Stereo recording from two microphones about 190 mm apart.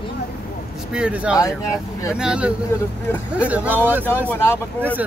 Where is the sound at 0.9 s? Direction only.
5° right (ahead or behind).